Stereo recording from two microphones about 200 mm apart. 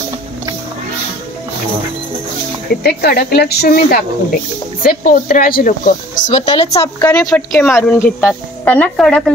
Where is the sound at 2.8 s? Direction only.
50° left (ahead or behind); by 6.8 s 35° left (ahead or behind).